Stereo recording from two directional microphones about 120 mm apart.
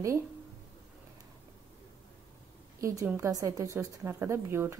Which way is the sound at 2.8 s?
25° right (ahead or behind).